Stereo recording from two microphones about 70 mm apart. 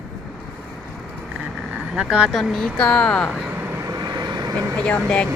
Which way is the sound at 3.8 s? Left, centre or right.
Right.